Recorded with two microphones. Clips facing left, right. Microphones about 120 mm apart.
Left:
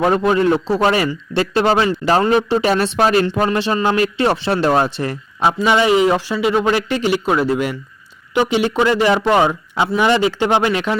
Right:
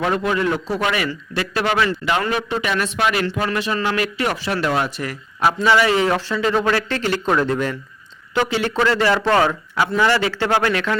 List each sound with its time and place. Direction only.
0.0 s a man's voice: 30° left (ahead or behind)